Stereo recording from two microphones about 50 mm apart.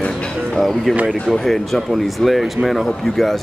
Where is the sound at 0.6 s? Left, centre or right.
Centre.